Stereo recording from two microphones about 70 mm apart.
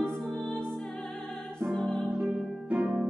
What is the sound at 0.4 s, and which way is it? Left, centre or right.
Music, centre.